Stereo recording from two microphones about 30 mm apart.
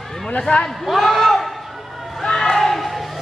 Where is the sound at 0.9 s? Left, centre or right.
Centre.